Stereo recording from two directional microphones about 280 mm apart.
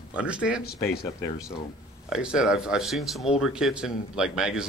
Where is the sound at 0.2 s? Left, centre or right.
Centre.